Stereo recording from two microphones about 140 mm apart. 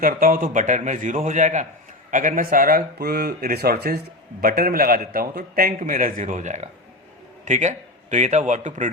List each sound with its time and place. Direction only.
0.0 s a man's voice: 85° right; by 8.9 s 60° right (ahead or behind)